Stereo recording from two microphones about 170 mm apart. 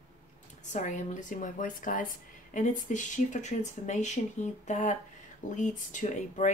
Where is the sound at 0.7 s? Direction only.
45° left (ahead or behind).